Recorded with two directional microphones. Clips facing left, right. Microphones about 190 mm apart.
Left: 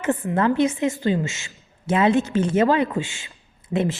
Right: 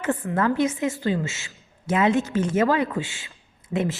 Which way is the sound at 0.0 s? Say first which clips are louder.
Left 2 dB; 25° left (ahead or behind).